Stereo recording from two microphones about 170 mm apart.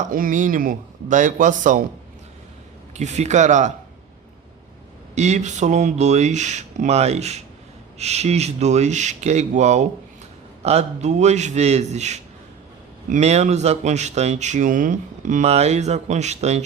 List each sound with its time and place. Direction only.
0.0 s speech: 55° right (ahead or behind)
2.9 s speech: 40° right (ahead or behind)
5.1 s speech: 40° right (ahead or behind)